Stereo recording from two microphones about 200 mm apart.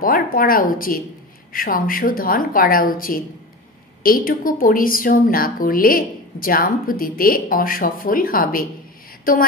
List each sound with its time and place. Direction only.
0.0 s a woman's voice: 45° left (ahead or behind)